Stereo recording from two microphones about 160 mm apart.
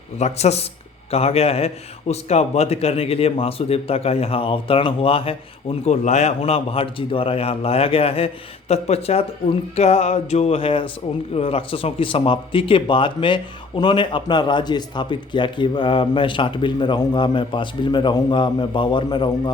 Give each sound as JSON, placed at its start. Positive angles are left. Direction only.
{"t": 0.2, "sound": "a man's voice", "side_deg": 45}